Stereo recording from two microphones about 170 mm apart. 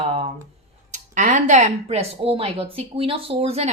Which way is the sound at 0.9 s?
45° right (ahead or behind).